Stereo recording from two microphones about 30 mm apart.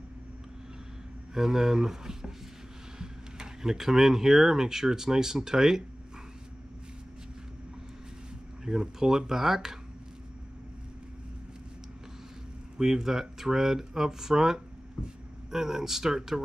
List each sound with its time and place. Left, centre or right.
1.3 s speech: centre
8.6 s speech: centre
12.7 s speech: centre
15.0 s speech: right
15.5 s speech: centre